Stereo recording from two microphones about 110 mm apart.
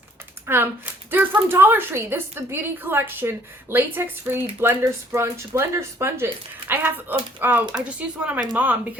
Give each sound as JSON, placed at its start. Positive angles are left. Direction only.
{"t": 0.4, "sound": "a woman's voice", "side_deg": -20}